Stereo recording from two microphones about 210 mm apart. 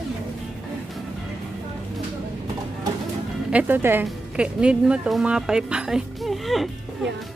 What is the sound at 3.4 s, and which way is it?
Speech, 10° right (ahead or behind).